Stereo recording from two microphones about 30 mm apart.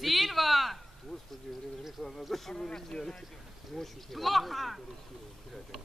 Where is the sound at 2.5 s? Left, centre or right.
Left.